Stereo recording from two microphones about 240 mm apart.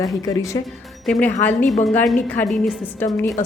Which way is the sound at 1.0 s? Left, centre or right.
Centre.